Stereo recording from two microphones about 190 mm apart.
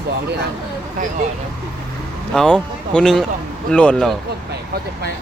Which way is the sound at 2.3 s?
5° left (ahead or behind).